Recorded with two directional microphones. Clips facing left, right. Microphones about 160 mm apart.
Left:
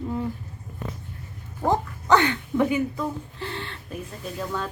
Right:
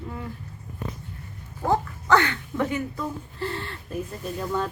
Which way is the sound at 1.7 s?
20° left (ahead or behind).